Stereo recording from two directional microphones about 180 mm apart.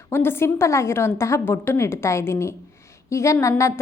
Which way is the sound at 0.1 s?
15° left (ahead or behind).